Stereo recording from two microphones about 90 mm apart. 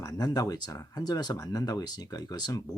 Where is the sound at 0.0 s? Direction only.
45° left (ahead or behind).